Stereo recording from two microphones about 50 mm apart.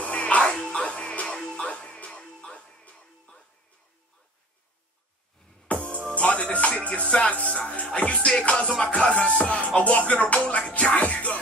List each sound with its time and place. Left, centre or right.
0.0 s music: left
0.5 s music: centre
0.7 s music: left
5.7 s music: left; by 9.1 s centre
9.4 s music: left